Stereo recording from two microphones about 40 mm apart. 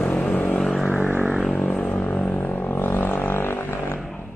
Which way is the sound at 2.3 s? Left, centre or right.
Left.